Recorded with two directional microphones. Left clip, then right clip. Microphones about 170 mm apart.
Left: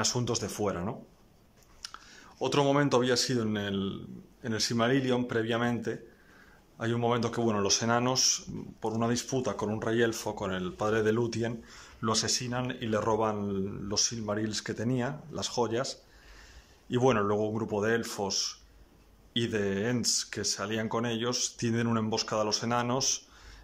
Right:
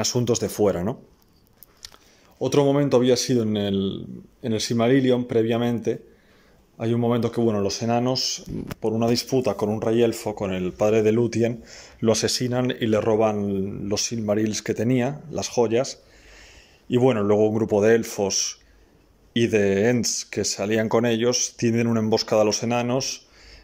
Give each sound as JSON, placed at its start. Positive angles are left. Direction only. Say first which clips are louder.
{"t": 0.0, "sound": "speech", "louder": "right 8 dB", "side_deg": -15}
{"t": 2.3, "sound": "speech", "louder": "right 6 dB", "side_deg": -15}
{"t": 12.3, "sound": "speech", "louder": "right 8 dB", "side_deg": -25}
{"t": 13.0, "sound": "speech", "louder": "right 7 dB", "side_deg": -15}
{"t": 13.4, "sound": "speech", "louder": "right 7 dB", "side_deg": 0}
{"t": 13.8, "sound": "speech", "louder": "right 6 dB", "side_deg": -15}
{"t": 17.4, "sound": "speech", "louder": "right 11 dB", "side_deg": -15}
{"t": 22.1, "sound": "speech", "louder": "right 13 dB", "side_deg": -25}